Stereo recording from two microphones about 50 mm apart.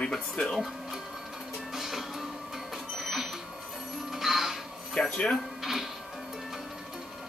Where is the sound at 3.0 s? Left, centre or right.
Centre.